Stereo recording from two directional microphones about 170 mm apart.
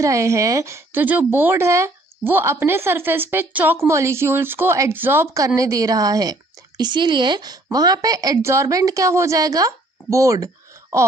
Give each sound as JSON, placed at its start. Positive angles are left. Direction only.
{"t": 0.0, "sound": "a woman's voice", "side_deg": -20}